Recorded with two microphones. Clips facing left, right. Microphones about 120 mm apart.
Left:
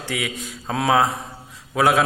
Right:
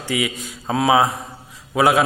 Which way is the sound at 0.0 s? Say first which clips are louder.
Right 4 dB; 5° right (ahead or behind).